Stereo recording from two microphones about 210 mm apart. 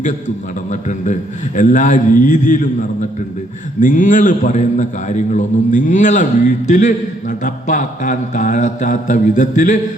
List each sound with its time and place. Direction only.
0.7 s speech: 35° left (ahead or behind)
3.8 s speech: 35° left (ahead or behind)